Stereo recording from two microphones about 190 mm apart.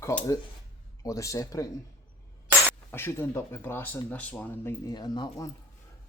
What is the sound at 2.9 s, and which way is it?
Speech, 10° left (ahead or behind).